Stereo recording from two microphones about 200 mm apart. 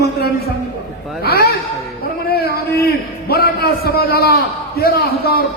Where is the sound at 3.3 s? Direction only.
50° left (ahead or behind).